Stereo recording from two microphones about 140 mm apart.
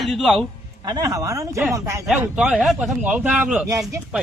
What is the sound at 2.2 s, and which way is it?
A man's voice, 10° right (ahead or behind).